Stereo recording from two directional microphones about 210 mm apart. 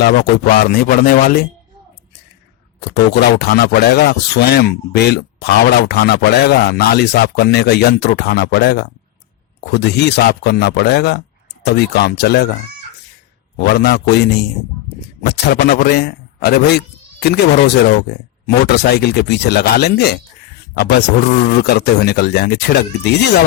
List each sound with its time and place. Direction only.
0.0 s speech: 45° left (ahead or behind)
2.8 s speech: 50° left (ahead or behind)
13.7 s speech: 50° left (ahead or behind)